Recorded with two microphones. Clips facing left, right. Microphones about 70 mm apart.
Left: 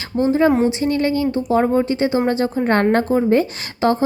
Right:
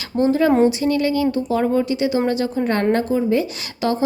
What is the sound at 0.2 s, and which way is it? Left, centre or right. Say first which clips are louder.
Speech: even; left.